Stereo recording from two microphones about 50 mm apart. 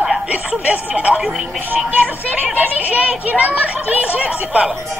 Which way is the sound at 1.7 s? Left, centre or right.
Right.